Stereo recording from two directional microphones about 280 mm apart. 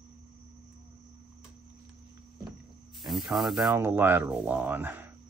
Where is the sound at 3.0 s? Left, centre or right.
Centre.